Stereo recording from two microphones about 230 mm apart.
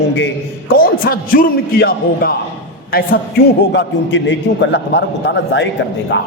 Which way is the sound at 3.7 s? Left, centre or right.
Left.